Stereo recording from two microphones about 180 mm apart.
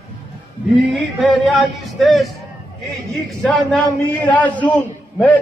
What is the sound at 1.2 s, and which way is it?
Music, centre (ahead or behind).